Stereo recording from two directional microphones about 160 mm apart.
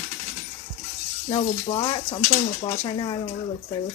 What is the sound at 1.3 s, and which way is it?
Speech, 30° left (ahead or behind).